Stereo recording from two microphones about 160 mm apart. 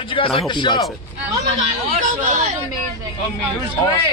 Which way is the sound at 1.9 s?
55° right (ahead or behind).